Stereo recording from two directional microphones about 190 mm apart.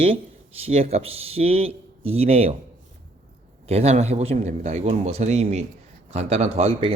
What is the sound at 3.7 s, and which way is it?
Speech, 35° right (ahead or behind).